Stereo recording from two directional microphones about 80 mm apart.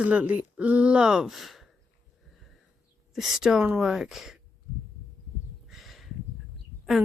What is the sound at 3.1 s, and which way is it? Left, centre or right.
Speech, centre.